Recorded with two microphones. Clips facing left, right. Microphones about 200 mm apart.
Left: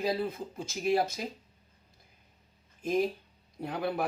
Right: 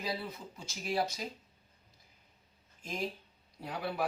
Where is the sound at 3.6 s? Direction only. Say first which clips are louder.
Left 4 dB; 50° left (ahead or behind).